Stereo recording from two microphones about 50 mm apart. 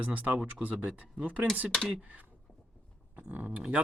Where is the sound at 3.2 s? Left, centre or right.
Right.